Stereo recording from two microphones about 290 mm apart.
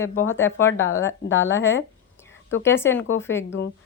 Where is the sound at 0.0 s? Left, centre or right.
Centre.